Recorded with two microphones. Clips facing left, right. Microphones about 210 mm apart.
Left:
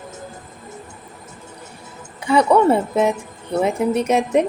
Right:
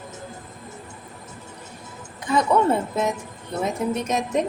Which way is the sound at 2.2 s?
70° left (ahead or behind).